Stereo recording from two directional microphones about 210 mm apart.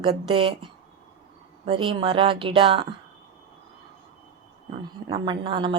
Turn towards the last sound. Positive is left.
turn(degrees=-25)  # may be behind; listen again after turning